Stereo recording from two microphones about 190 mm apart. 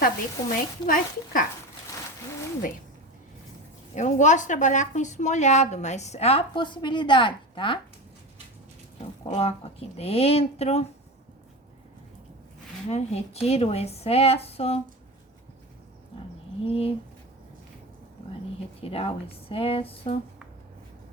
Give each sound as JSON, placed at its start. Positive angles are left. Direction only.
{"t": 0.0, "sound": "speech", "side_deg": 45}
{"t": 3.9, "sound": "a woman's voice", "side_deg": 40}
{"t": 9.2, "sound": "a woman's voice", "side_deg": 30}
{"t": 12.9, "sound": "a woman's voice", "side_deg": 35}
{"t": 16.6, "sound": "a woman's voice", "side_deg": 30}
{"t": 18.8, "sound": "a woman's voice", "side_deg": 30}